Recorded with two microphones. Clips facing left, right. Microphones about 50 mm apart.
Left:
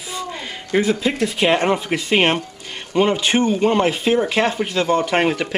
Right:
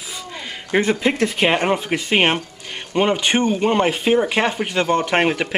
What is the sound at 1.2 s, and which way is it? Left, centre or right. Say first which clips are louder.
Speech: left 2 dB; centre.